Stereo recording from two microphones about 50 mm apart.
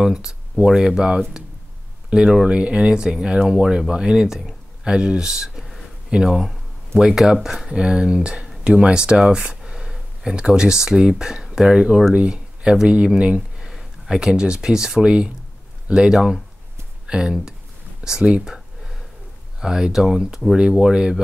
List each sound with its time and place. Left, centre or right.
0.0 s speech: centre
18.4 s a sound: centre
19.6 s speech: centre